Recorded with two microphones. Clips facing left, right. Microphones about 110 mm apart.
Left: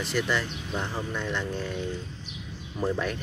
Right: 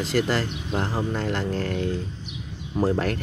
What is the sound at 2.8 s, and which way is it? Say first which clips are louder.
Speech: right 5 dB; 75° right (ahead or behind).